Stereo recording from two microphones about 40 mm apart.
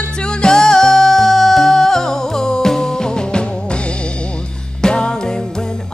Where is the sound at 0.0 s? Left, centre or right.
Left.